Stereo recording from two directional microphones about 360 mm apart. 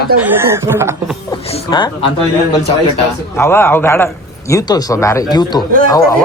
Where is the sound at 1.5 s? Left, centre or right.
Centre.